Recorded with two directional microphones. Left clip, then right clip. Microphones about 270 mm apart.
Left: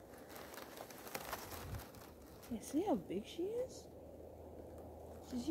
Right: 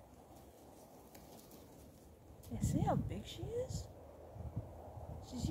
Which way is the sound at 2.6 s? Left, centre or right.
Right.